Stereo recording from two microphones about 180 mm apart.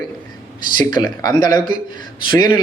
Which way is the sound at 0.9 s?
20° left (ahead or behind).